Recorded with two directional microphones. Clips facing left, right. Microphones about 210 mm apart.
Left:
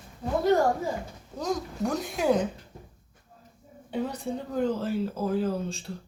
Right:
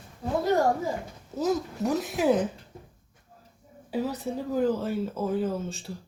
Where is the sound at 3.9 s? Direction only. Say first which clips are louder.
Right 1 dB; 5° right (ahead or behind).